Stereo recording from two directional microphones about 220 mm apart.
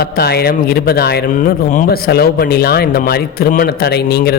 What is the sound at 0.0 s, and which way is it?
Speech, 45° left (ahead or behind).